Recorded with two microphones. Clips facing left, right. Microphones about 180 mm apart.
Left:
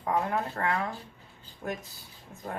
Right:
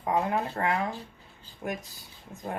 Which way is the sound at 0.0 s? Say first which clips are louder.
Right 1 dB; 20° right (ahead or behind).